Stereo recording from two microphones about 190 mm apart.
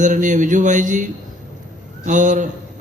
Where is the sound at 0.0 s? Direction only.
40° right (ahead or behind).